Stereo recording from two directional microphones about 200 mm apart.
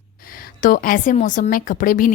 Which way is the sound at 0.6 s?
45° left (ahead or behind).